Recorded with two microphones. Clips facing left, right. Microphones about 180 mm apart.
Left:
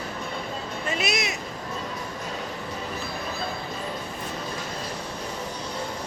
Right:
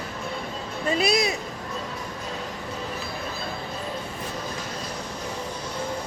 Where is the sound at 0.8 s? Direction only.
35° right (ahead or behind).